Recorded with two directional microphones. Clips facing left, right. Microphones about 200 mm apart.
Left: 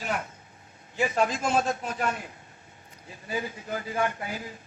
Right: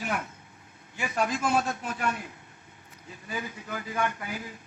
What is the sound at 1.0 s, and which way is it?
Speech, 40° left (ahead or behind).